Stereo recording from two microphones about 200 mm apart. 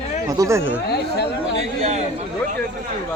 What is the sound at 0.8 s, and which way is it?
Speech, 55° left (ahead or behind).